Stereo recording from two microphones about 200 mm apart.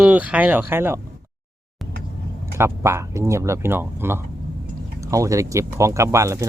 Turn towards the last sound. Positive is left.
turn(degrees=-15)  # may be behind; listen again after turning